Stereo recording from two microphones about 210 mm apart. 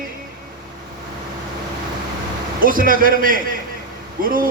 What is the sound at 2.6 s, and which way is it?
A man's voice, 40° right (ahead or behind).